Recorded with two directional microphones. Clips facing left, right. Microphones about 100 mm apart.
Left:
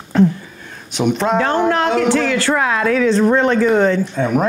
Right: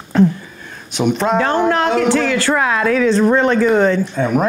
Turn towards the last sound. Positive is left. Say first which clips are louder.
# even
turn(degrees=-30)  # may be behind; listen again after turning